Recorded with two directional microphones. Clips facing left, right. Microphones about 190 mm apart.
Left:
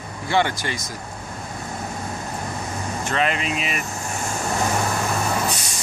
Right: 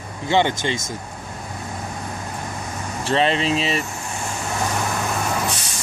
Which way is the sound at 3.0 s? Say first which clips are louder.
Right 5 dB; 30° right (ahead or behind).